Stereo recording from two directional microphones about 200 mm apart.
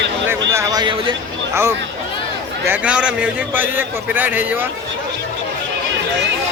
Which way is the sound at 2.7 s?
5° right (ahead or behind).